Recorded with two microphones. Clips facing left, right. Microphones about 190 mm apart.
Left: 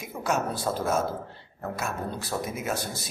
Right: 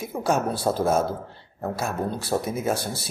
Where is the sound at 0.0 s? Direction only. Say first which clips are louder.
Right 4 dB; 30° right (ahead or behind).